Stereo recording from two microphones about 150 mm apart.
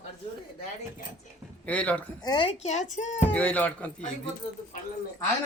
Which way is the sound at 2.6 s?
50° left (ahead or behind).